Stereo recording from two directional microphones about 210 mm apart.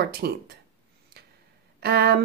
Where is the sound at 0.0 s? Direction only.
50° right (ahead or behind).